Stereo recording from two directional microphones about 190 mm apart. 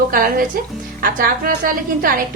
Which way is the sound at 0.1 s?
45° right (ahead or behind).